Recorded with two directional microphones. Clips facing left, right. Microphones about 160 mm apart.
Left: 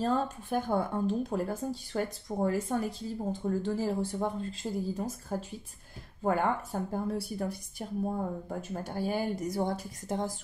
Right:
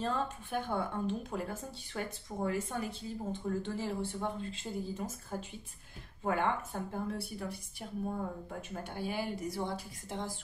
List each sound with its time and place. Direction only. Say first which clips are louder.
0.0 s speech: left 5 dB; 40° left (ahead or behind)
6.2 s a woman's voice: left 4 dB; 40° left (ahead or behind)